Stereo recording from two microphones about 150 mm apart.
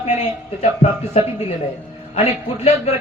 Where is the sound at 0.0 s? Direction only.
45° left (ahead or behind).